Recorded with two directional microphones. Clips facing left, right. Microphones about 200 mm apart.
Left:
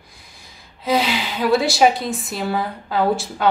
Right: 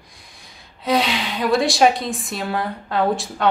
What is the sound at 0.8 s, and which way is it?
A woman's voice, centre (ahead or behind).